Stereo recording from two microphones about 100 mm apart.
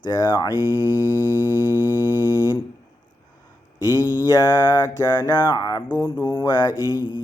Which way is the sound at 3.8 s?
40° left (ahead or behind).